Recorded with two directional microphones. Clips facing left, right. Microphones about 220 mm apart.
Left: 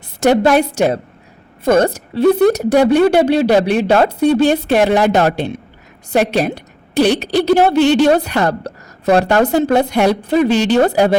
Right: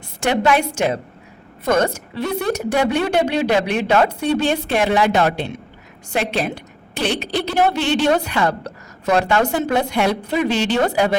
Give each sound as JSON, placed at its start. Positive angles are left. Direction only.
{"t": 0.2, "sound": "a woman's voice", "side_deg": 40}